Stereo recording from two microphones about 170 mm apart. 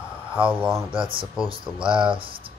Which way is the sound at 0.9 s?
30° right (ahead or behind).